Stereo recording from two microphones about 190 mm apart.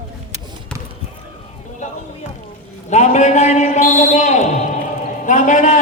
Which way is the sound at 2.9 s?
40° left (ahead or behind).